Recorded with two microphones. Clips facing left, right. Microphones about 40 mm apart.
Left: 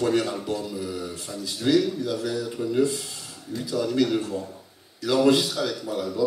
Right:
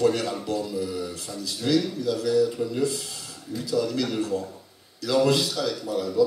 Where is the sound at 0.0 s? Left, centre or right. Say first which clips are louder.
Even; centre.